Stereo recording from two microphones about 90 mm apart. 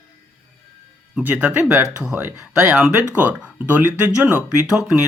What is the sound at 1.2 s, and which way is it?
Speech, 15° right (ahead or behind).